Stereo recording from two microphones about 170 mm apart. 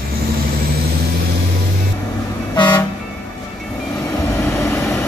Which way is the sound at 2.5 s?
25° left (ahead or behind).